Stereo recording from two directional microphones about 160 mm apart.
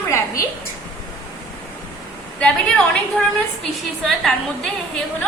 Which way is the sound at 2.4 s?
5° left (ahead or behind).